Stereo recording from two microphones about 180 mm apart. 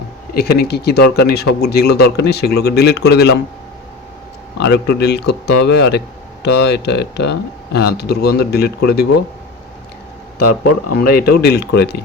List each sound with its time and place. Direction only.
0.3 s speech: 60° left (ahead or behind)
4.5 s speech: 65° left (ahead or behind)
10.9 s speech: 55° left (ahead or behind)